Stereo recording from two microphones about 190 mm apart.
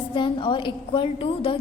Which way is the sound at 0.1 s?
25° left (ahead or behind).